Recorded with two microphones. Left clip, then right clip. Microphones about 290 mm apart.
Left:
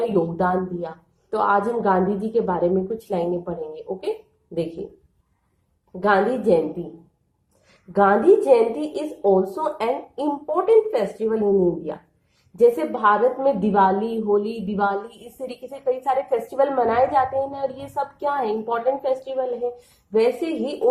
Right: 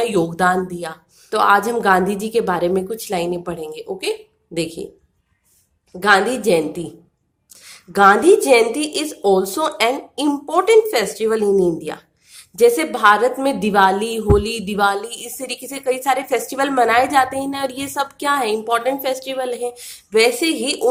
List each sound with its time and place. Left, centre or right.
0.0 s a woman's voice: right
6.0 s a woman's voice: right
7.9 s a woman's voice: right